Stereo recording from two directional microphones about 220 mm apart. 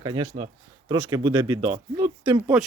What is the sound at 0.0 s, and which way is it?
Speech, 20° right (ahead or behind).